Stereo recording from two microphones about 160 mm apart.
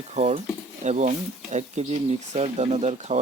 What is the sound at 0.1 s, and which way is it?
Speech, 45° right (ahead or behind).